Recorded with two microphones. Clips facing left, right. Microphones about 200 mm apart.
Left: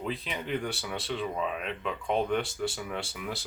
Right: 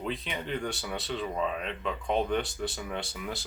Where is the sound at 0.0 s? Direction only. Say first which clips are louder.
Even; centre (ahead or behind).